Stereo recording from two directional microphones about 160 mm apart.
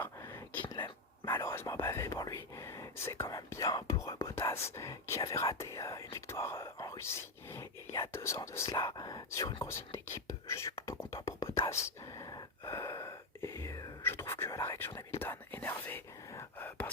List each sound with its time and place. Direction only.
0.0 s whispering: 20° left (ahead or behind)
4.2 s speech: 15° left (ahead or behind)
9.6 s whispering: 15° left (ahead or behind)
11.7 s gasp: 20° left (ahead or behind)